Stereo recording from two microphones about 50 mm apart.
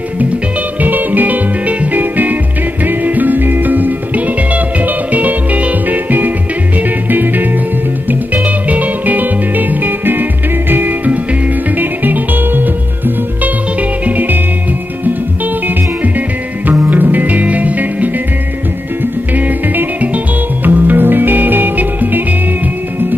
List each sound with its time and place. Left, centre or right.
0.7 s music: right
16.6 s music: right
19.3 s music: right